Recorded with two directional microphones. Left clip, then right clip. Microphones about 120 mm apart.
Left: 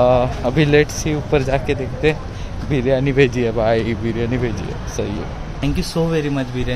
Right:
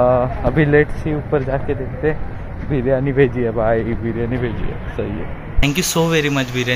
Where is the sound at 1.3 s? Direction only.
45° left (ahead or behind).